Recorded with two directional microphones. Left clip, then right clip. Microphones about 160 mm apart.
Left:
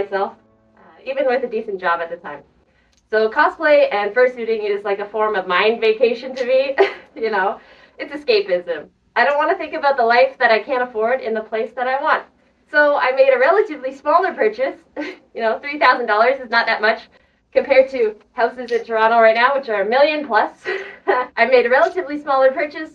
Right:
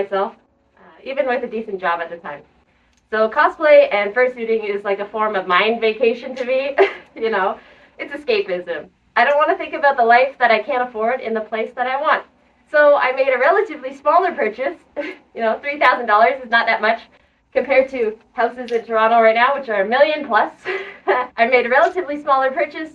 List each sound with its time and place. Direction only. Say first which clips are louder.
1.0 s a woman's voice: left 2 dB; 20° right (ahead or behind)
3.1 s a woman's voice: even; 15° right (ahead or behind)